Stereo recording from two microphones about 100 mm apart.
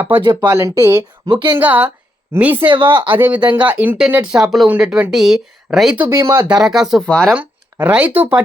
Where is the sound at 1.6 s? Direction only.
20° right (ahead or behind).